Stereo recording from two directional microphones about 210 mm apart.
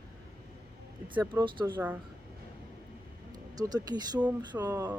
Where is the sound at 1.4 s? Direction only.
25° right (ahead or behind).